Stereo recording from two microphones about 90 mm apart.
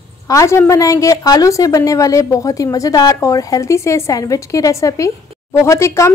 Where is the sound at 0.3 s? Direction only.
35° left (ahead or behind).